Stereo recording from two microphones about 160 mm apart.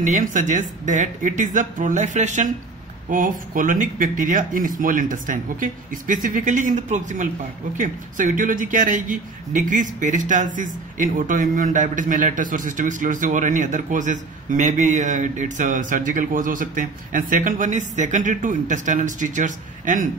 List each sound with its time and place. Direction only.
0.0 s speech: 50° right (ahead or behind)